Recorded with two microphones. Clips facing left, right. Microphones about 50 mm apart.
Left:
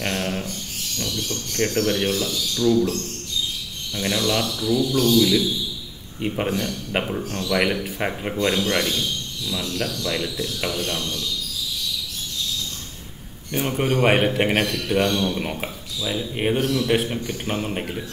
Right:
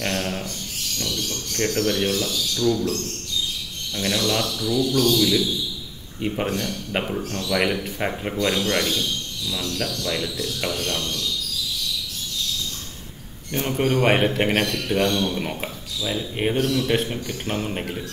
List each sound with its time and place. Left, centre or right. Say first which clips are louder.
0.0 s a man's voice: even; centre
2.7 s speech: left 7 dB; left
3.9 s a man's voice: left 1 dB; centre
10.0 s speech: left 1 dB; centre
13.5 s a man's voice: even; centre